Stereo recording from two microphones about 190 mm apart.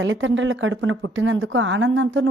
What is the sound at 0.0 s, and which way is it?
A woman's voice, 85° right.